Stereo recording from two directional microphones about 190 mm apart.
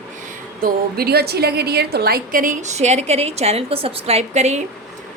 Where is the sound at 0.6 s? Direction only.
55° right (ahead or behind); by 4.6 s 35° right (ahead or behind).